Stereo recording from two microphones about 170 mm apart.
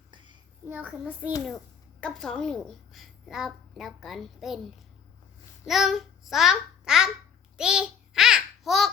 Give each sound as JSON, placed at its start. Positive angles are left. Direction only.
{"t": 0.6, "sound": "a child's voice", "side_deg": -10}
{"t": 1.5, "sound": "a woman's voice", "side_deg": 5}
{"t": 5.6, "sound": "a child's voice", "side_deg": 0}
{"t": 7.5, "sound": "babbling", "side_deg": -5}